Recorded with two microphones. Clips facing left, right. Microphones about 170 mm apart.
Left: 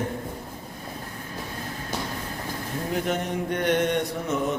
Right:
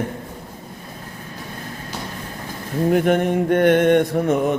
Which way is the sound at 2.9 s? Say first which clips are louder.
Right 10 dB; 60° right (ahead or behind).